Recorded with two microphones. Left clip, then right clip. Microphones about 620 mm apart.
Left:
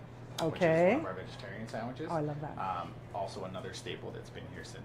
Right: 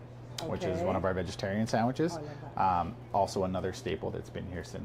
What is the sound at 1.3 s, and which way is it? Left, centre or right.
Speech, right.